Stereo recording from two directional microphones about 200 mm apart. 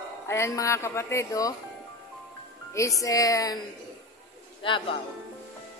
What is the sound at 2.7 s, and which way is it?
Speech, 15° left (ahead or behind).